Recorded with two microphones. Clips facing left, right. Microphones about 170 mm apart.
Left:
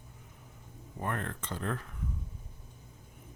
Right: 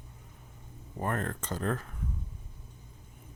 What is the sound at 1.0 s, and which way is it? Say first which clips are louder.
Speech: right 3 dB; 40° right (ahead or behind).